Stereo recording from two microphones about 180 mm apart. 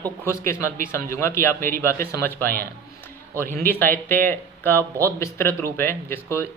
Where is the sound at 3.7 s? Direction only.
10° left (ahead or behind).